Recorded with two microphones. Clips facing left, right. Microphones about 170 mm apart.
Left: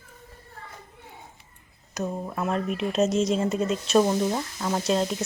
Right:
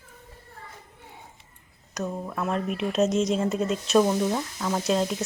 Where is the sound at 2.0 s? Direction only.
15° left (ahead or behind).